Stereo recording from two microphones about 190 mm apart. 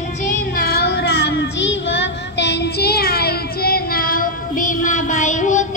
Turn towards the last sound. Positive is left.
turn(degrees=40)  # may be behind; listen again after turning